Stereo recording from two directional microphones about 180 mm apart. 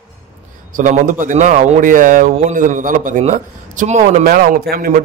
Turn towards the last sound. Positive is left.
turn(degrees=-55)  # may be behind; listen again after turning